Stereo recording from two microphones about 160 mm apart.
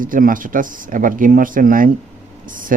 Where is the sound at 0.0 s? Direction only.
60° right (ahead or behind).